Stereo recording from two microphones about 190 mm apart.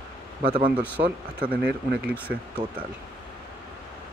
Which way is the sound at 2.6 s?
20° right (ahead or behind).